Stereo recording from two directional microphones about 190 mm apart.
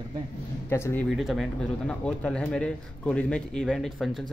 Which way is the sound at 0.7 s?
10° left (ahead or behind).